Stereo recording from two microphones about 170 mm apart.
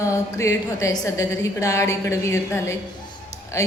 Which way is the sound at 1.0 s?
20° left (ahead or behind).